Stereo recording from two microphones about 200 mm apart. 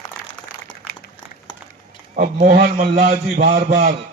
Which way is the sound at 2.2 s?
45° right (ahead or behind).